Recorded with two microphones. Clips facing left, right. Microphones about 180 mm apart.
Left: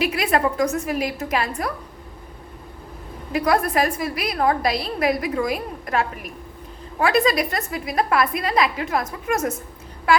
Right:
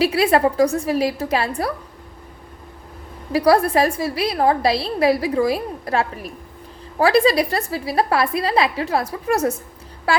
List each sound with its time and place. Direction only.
0.0 s a woman's voice: 30° right (ahead or behind)
3.3 s a woman's voice: 35° right (ahead or behind)
10.1 s a sound: 30° right (ahead or behind)